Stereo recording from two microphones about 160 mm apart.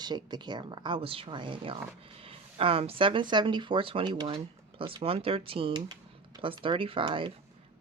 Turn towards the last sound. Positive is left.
turn(degrees=-30)  # may be behind; listen again after turning